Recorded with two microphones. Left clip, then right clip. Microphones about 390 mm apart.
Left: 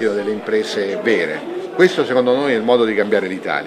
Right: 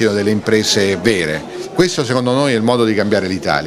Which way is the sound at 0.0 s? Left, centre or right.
Right.